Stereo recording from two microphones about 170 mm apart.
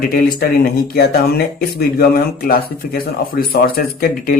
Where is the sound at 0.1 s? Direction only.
60° left (ahead or behind).